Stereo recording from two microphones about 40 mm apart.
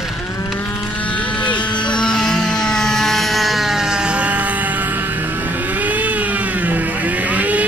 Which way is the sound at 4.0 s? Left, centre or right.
Right.